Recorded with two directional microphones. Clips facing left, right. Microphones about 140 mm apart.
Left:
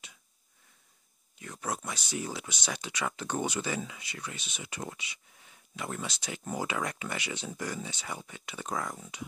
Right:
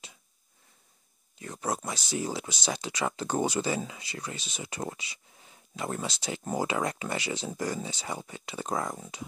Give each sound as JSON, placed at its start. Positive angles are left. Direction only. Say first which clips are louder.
{"t": 1.4, "sound": "speech", "louder": "right 4 dB", "side_deg": -35}